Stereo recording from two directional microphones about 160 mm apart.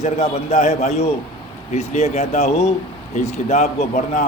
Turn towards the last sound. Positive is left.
turn(degrees=50)  # may be behind; listen again after turning